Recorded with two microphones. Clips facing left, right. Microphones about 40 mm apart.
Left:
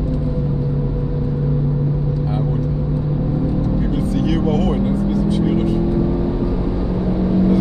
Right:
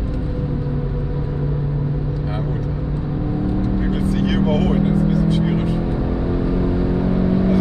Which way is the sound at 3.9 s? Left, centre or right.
Right.